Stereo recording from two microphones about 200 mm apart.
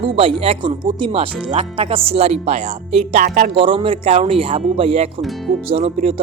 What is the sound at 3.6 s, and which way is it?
Speech, 25° right (ahead or behind).